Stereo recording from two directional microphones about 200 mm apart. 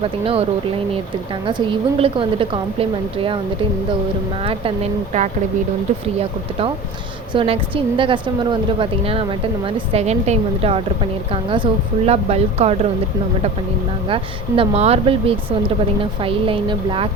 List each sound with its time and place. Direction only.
0.0 s a woman's voice: 30° right (ahead or behind)
1.5 s a woman's voice: 25° right (ahead or behind)
4.4 s speech: 30° right (ahead or behind)
7.3 s a woman's voice: 25° right (ahead or behind)
14.1 s a woman's voice: 25° right (ahead or behind)